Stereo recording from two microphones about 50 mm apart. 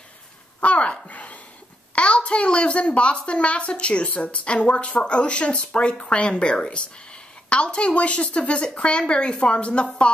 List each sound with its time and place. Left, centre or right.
0.6 s a woman's voice: left